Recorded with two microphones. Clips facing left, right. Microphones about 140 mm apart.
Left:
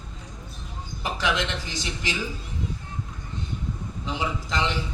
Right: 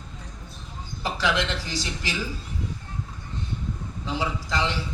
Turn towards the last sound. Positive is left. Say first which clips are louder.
# even
turn(degrees=20)  # may be behind; listen again after turning